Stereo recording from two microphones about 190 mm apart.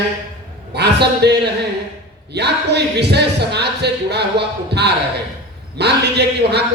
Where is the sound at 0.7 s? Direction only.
60° right (ahead or behind).